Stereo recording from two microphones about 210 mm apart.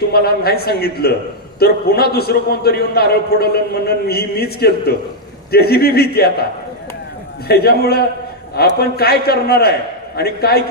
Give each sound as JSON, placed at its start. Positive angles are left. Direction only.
{"t": 0.1, "sound": "a man's voice", "side_deg": 50}
{"t": 7.4, "sound": "a man's voice", "side_deg": 50}